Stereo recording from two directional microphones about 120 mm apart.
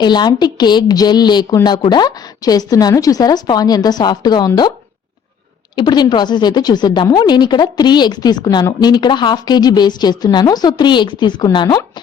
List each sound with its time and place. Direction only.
0.0 s speech: 40° left (ahead or behind)
5.7 s speech: 40° left (ahead or behind)